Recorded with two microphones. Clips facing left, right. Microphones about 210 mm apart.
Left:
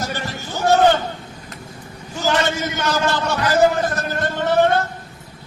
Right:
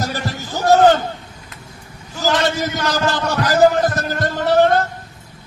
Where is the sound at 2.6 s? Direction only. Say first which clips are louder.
Right 1 dB; 35° right (ahead or behind).